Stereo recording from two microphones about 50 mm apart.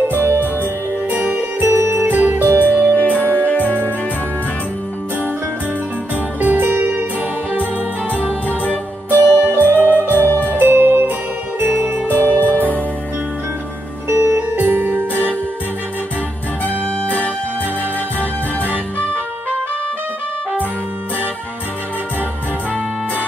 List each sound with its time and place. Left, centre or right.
0.1 s music: right
1.7 s music: right
2.0 s music: right
2.9 s music: left
6.4 s music: right
9.1 s music: right
9.7 s music: left
10.5 s jingle bell: right
11.6 s jingle bell: right
12.2 s music: right
14.0 s music: right
14.8 s music: right
16.6 s music: left